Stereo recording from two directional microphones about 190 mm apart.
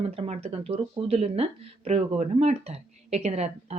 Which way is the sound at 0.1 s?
35° right (ahead or behind).